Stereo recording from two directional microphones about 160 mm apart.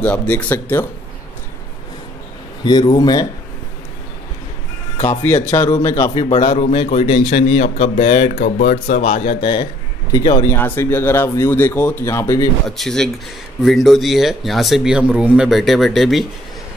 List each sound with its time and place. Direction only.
0.0 s speech: 10° left (ahead or behind)
2.6 s speech: 25° left (ahead or behind)
4.9 s music: 35° left (ahead or behind)
5.2 s speech: 15° left (ahead or behind)
6.2 s a man's voice: 35° left (ahead or behind)
8.4 s speech: 70° left (ahead or behind); by 9.3 s 45° left (ahead or behind)
9.4 s speech: 30° left (ahead or behind)
10.5 s speech: 15° left (ahead or behind)
12.6 s speech: centre (ahead or behind)